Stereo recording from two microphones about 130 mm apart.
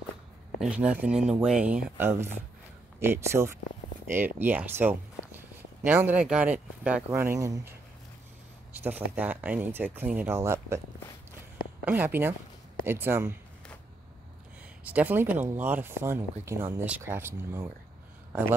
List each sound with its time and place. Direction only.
0.6 s speech: 10° right (ahead or behind); by 7.7 s 25° right (ahead or behind)
8.8 s speech: 10° right (ahead or behind)
11.8 s speech: 15° right (ahead or behind)
14.9 s speech: 15° right (ahead or behind)